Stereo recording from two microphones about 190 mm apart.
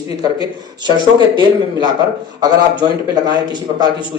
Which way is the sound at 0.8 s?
25° right (ahead or behind).